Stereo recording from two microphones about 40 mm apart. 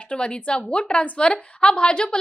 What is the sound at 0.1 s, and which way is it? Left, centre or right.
A woman's voice, left.